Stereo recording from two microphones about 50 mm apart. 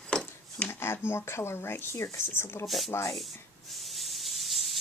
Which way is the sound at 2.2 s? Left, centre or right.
Left.